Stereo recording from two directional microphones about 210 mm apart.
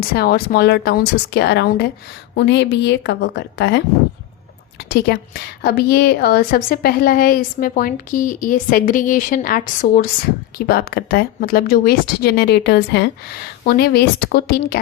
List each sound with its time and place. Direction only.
0.1 s a woman's voice: 45° left (ahead or behind)
4.9 s a woman's voice: 50° left (ahead or behind)